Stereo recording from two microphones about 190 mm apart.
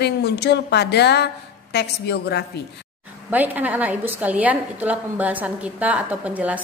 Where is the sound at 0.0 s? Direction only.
60° left (ahead or behind).